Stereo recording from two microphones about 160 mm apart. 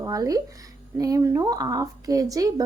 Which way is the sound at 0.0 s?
20° right (ahead or behind).